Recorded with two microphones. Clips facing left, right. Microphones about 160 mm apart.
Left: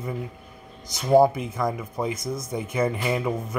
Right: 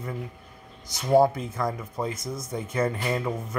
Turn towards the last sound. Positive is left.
turn(degrees=15)  # may be behind; listen again after turning